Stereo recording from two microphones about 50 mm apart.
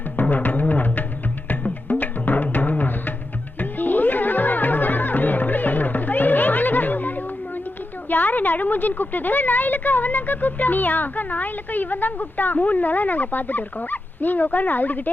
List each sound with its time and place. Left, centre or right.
0.2 s music: left
8.1 s a woman's voice: left